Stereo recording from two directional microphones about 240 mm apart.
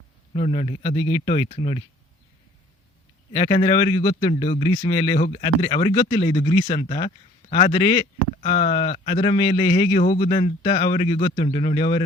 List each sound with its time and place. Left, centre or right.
0.3 s a man's voice: left
3.3 s a man's voice: left